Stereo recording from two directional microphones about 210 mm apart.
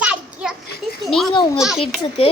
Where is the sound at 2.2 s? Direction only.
25° left (ahead or behind).